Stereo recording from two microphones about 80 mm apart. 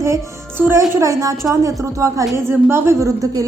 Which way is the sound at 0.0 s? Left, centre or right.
Right.